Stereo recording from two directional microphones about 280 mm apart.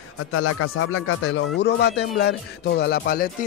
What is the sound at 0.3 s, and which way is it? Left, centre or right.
Speech, left.